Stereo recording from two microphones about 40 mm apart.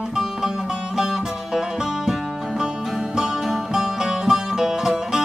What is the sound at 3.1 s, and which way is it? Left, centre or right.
Music, centre.